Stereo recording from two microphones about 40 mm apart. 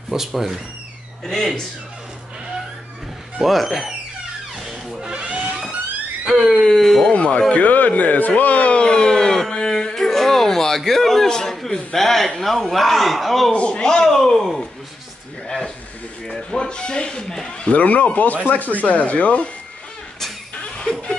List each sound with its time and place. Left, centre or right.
0.1 s speech: centre
1.2 s a man's voice: centre
3.3 s speech: centre
5.0 s a sound: right
6.2 s a sound: centre
6.5 s a man's voice: centre
6.8 s speech: centre
7.1 s speech: left
7.5 s a man's voice: left; by 13.5 s centre
13.5 s speech: left
14.0 s a man's voice: centre
17.6 s speech: left